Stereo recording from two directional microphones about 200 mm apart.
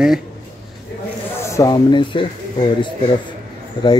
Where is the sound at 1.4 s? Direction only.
15° left (ahead or behind).